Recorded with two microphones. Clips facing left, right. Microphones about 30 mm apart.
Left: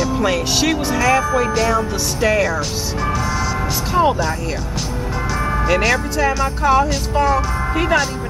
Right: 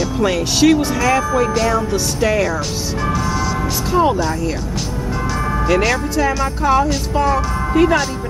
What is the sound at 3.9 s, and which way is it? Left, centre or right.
Speech, centre.